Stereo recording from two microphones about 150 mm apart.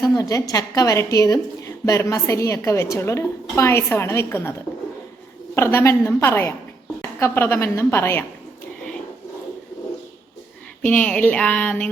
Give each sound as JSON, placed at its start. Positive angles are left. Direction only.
{"t": 0.0, "sound": "a woman's voice", "side_deg": 20}
{"t": 5.5, "sound": "a woman's voice", "side_deg": 20}
{"t": 10.8, "sound": "a woman's voice", "side_deg": 10}